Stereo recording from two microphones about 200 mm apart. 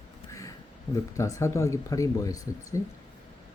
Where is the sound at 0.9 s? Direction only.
15° left (ahead or behind).